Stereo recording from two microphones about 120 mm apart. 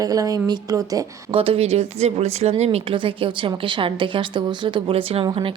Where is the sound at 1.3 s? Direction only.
50° right (ahead or behind).